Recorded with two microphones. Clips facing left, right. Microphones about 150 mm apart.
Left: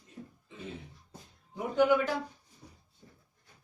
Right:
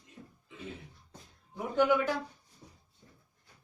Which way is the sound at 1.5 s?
15° left (ahead or behind).